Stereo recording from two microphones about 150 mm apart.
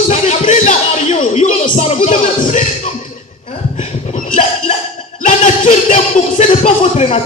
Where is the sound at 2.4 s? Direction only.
55° left (ahead or behind).